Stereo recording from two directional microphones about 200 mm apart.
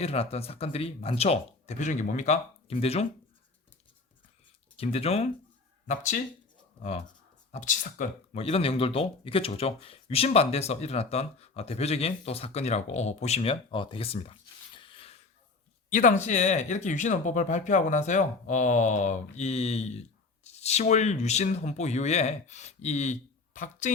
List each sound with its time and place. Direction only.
0.0 s speech: 30° left (ahead or behind)
4.8 s speech: 30° left (ahead or behind)
7.5 s speech: 40° left (ahead or behind)
8.4 s speech: 30° left (ahead or behind)
14.8 s a sound: 25° left (ahead or behind)
15.9 s speech: 40° left (ahead or behind)